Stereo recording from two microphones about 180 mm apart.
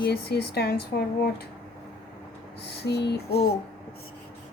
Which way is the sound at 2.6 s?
65° left (ahead or behind).